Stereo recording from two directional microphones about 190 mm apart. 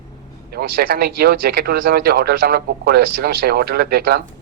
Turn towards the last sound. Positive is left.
turn(degrees=-55)  # may be behind; listen again after turning